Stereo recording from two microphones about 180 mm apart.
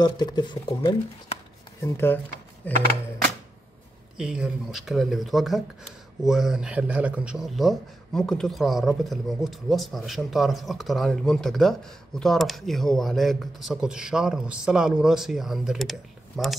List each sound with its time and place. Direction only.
0.0 s speech: 25° left (ahead or behind)
1.8 s speech: 15° left (ahead or behind)
4.2 s a man's voice: 5° right (ahead or behind)